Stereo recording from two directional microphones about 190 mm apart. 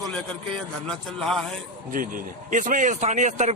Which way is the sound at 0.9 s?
Centre (ahead or behind).